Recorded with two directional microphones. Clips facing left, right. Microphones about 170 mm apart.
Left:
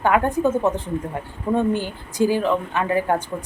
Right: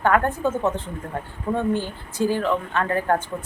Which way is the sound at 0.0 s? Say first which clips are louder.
Left 2 dB; 15° left (ahead or behind).